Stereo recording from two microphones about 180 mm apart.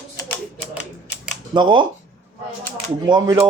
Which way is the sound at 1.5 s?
25° right (ahead or behind).